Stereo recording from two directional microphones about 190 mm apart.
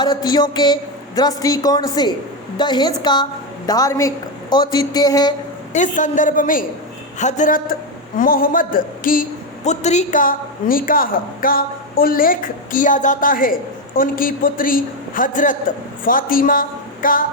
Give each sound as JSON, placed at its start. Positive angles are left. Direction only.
{"t": 0.0, "sound": "a woman's voice", "side_deg": 20}
{"t": 5.7, "sound": "a woman's voice", "side_deg": 40}